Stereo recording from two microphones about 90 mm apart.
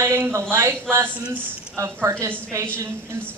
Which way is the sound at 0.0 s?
30° right (ahead or behind).